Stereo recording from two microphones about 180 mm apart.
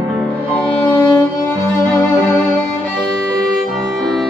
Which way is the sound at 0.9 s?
15° left (ahead or behind).